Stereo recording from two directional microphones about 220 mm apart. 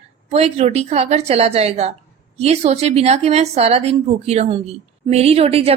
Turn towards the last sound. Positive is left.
turn(degrees=-25)  # may be behind; listen again after turning